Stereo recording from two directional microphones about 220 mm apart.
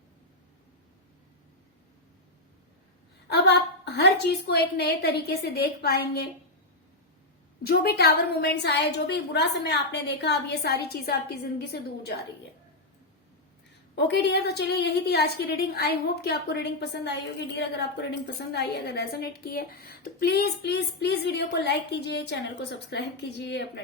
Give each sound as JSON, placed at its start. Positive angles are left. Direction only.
{"t": 3.2, "sound": "a woman's voice", "side_deg": 50}
{"t": 7.6, "sound": "a woman's voice", "side_deg": 45}
{"t": 13.9, "sound": "a woman's voice", "side_deg": 50}